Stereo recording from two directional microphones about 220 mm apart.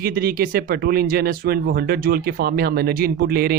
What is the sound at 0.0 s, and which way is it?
Speech, 40° right (ahead or behind).